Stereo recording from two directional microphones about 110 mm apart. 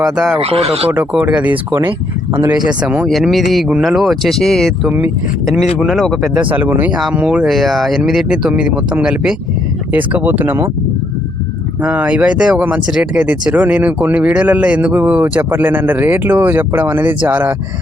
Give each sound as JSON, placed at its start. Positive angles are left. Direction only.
{"t": 0.0, "sound": "speech", "side_deg": -5}
{"t": 0.3, "sound": "speech", "side_deg": -65}
{"t": 0.9, "sound": "speech", "side_deg": -15}
{"t": 2.6, "sound": "speech", "side_deg": -10}
{"t": 4.9, "sound": "speech", "side_deg": -15}
{"t": 5.8, "sound": "speech", "side_deg": 0}
{"t": 6.4, "sound": "speech", "side_deg": -15}
{"t": 11.8, "sound": "speech", "side_deg": -10}